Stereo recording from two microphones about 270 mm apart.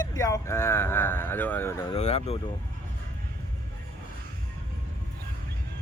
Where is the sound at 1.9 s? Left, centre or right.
Left.